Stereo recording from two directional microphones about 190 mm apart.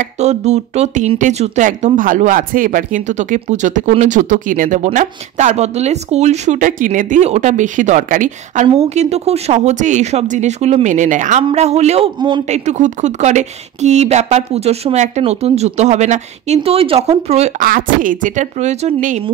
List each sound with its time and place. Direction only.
0.2 s speech: 35° right (ahead or behind)